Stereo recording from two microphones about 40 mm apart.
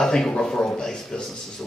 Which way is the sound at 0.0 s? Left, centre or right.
Centre.